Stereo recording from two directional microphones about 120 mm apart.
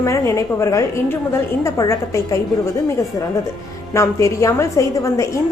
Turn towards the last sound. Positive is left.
turn(degrees=25)  # may be behind; listen again after turning